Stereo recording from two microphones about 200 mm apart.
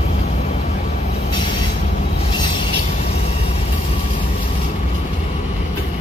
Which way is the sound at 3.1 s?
30° left (ahead or behind).